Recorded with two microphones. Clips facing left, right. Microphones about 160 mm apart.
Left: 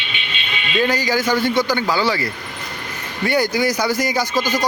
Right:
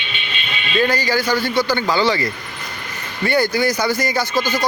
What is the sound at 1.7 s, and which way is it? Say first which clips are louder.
Speech: right 1 dB; 10° left (ahead or behind).